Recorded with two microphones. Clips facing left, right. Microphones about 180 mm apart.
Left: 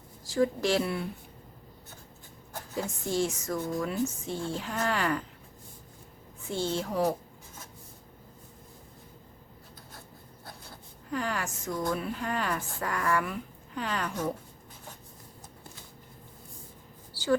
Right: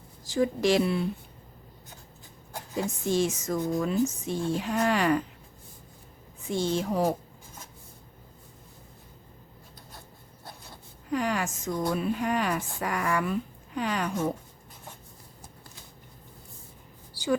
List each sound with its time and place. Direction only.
0.3 s a woman's voice: 20° right (ahead or behind)
2.5 s a woman's voice: 20° right (ahead or behind)
6.4 s a woman's voice: 15° right (ahead or behind)
11.1 s a woman's voice: 15° right (ahead or behind)
17.1 s a sound: 15° right (ahead or behind)